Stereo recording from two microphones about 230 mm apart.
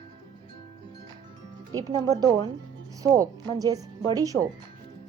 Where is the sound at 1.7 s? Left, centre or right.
Centre.